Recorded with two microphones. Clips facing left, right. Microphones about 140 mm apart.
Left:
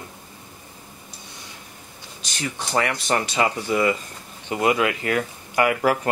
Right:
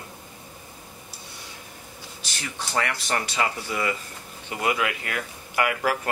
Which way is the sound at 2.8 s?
20° left (ahead or behind).